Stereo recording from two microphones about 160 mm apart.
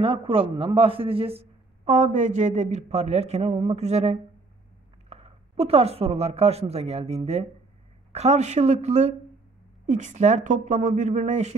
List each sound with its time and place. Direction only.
0.0 s a man's voice: 35° right (ahead or behind)
1.9 s a woman's voice: 45° right (ahead or behind)